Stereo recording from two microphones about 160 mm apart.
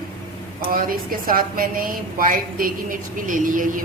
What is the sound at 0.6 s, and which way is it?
A woman's voice, 65° right (ahead or behind).